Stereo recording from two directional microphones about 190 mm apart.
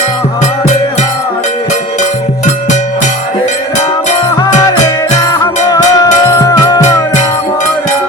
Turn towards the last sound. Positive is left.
turn(degrees=20)  # may be behind; listen again after turning